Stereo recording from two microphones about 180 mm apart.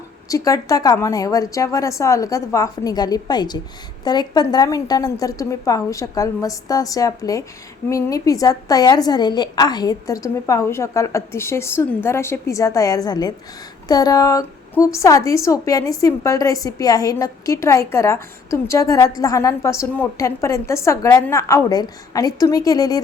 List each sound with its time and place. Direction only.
0.3 s a woman's voice: 20° left (ahead or behind)